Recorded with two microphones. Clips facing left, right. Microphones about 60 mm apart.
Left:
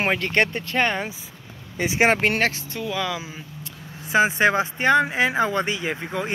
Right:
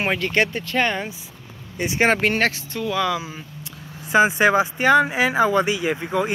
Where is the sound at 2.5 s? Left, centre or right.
Left.